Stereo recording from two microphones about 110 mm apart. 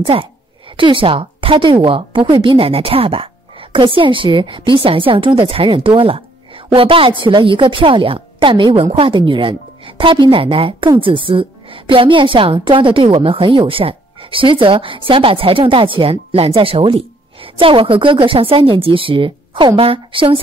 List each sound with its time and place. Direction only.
0.0 s a woman's voice: 55° right (ahead or behind)